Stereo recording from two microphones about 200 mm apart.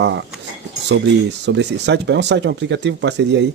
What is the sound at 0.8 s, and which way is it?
Speech, 60° right (ahead or behind).